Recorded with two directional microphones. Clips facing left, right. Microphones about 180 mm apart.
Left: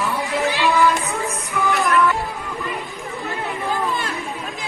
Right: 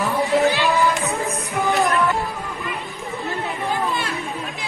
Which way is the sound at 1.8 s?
35° right (ahead or behind).